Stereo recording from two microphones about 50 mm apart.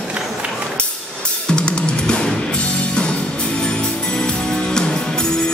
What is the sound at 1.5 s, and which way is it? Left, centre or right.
Music, centre.